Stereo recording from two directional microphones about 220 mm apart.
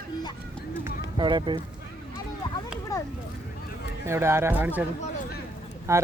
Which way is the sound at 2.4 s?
20° left (ahead or behind).